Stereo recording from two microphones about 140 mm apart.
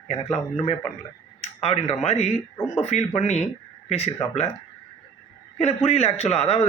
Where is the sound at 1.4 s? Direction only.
50° left (ahead or behind).